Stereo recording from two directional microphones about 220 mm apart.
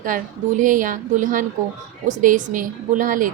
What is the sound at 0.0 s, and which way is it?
A woman's voice, 40° right (ahead or behind).